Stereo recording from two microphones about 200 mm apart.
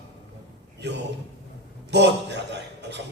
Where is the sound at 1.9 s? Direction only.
60° right (ahead or behind).